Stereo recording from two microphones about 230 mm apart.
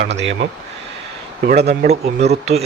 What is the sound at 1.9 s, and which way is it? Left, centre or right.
Speech, right.